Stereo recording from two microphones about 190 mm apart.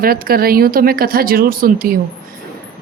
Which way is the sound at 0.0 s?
50° right (ahead or behind).